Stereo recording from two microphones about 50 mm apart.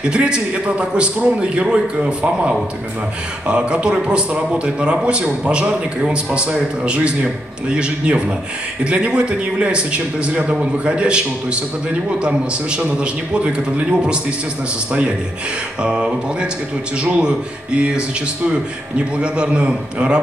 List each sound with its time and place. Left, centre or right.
0.0 s speech: right